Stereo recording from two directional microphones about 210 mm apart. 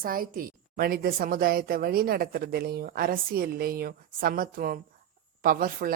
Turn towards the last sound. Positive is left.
turn(degrees=-40)  # may be behind; listen again after turning